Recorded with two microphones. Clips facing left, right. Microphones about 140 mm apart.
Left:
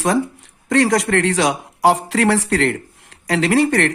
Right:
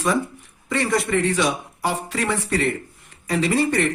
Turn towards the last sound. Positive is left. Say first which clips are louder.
# left 4 dB
turn(degrees=70)  # may be behind; listen again after turning